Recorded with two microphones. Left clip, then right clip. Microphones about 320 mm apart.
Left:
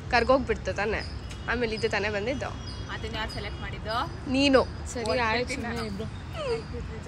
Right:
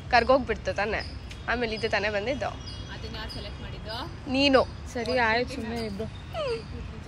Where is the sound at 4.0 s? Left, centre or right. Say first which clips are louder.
Right 1 dB; centre.